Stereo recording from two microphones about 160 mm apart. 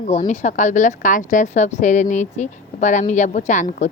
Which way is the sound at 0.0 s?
45° left (ahead or behind).